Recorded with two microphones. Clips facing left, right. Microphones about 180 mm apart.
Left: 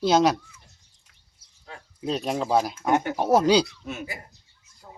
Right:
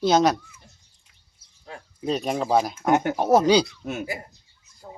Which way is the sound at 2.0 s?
Centre (ahead or behind).